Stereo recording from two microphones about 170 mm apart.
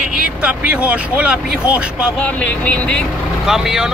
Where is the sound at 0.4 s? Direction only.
5° right (ahead or behind).